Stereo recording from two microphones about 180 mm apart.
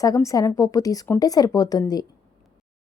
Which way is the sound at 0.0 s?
20° left (ahead or behind).